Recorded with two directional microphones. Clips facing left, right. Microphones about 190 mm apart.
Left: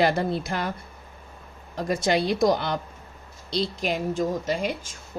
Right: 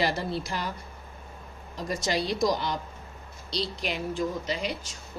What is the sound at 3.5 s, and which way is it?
A woman's voice, 45° left (ahead or behind).